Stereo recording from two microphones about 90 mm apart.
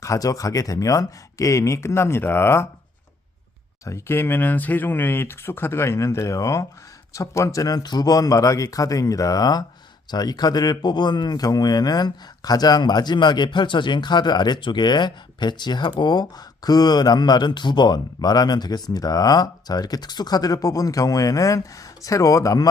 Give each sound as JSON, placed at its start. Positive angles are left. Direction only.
{"t": 0.0, "sound": "speech", "side_deg": 40}
{"t": 3.8, "sound": "speech", "side_deg": 30}